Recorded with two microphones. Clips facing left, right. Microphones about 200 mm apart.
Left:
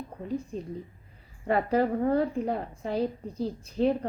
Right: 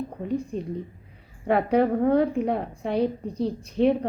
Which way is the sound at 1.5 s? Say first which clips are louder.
Right 4 dB; centre (ahead or behind).